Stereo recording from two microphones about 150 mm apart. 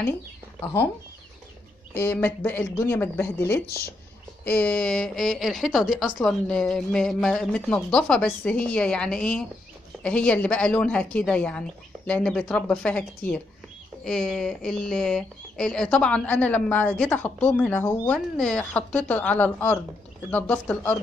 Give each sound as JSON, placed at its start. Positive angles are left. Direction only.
{"t": 2.0, "sound": "speech", "side_deg": 15}
{"t": 3.6, "sound": "speech", "side_deg": 90}
{"t": 4.5, "sound": "a woman's voice", "side_deg": 10}